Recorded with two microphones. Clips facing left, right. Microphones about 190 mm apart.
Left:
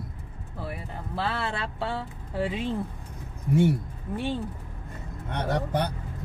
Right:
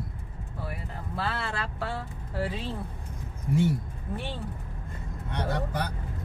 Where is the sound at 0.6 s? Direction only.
25° left (ahead or behind).